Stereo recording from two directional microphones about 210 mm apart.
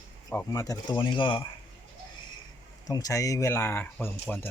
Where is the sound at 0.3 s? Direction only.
10° left (ahead or behind).